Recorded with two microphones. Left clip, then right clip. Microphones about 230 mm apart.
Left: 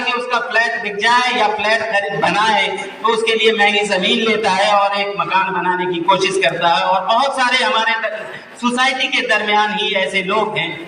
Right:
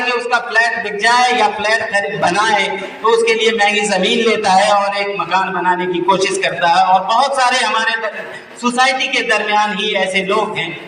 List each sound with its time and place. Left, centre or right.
0.5 s a man's voice: right
3.2 s a man's voice: left
3.6 s a man's voice: right
6.1 s a man's voice: right
6.4 s a man's voice: left
6.7 s a man's voice: right
8.8 s a man's voice: right